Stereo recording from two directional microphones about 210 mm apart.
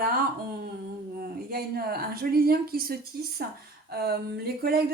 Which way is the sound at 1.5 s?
45° right (ahead or behind).